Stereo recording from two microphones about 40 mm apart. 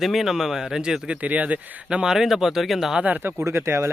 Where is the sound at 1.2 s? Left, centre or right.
Right.